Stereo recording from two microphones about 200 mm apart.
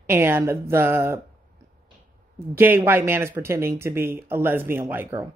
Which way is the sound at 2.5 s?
10° right (ahead or behind).